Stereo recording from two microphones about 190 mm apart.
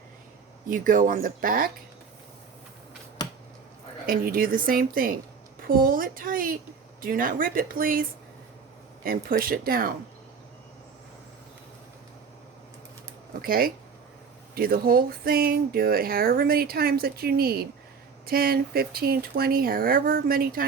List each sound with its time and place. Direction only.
0.7 s speech: 45° right (ahead or behind)
4.0 s speech: 50° right (ahead or behind)
9.0 s speech: 50° right (ahead or behind)
13.4 s speech: 50° right (ahead or behind)